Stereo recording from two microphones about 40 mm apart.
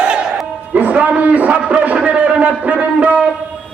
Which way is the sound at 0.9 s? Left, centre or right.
Right.